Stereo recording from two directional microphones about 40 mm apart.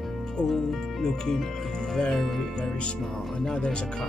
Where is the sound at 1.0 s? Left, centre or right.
Centre.